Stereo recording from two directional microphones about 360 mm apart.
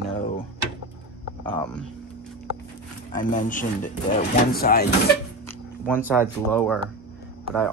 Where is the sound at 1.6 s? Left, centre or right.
Centre.